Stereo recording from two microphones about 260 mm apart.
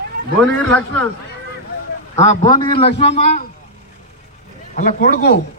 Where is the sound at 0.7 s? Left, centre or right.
Centre.